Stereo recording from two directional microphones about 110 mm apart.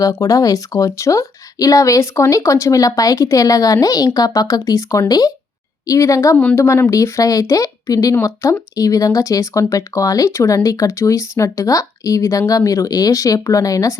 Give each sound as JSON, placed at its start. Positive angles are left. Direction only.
{"t": 0.0, "sound": "a woman's voice", "side_deg": 30}
{"t": 6.3, "sound": "a woman's voice", "side_deg": 15}